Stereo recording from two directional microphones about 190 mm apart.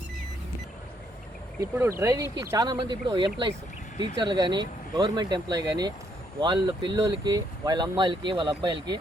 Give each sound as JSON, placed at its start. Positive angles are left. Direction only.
{"t": 1.6, "sound": "speech", "side_deg": -15}